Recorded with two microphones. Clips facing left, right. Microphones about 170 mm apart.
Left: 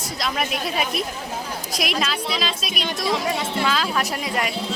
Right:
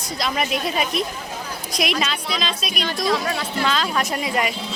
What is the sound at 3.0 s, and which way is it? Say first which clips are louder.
Speech: even; 20° left (ahead or behind).